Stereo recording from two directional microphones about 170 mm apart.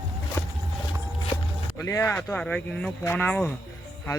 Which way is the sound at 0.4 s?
15° left (ahead or behind).